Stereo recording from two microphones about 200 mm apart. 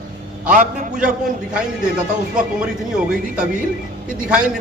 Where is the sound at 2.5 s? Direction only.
5° right (ahead or behind).